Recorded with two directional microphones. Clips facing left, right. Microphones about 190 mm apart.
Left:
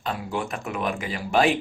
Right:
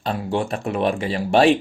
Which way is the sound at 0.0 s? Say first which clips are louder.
Right 5 dB; 30° right (ahead or behind).